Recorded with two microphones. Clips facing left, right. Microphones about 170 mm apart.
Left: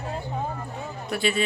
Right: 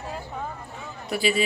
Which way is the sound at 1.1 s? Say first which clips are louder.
Right 1 dB; 5° right (ahead or behind).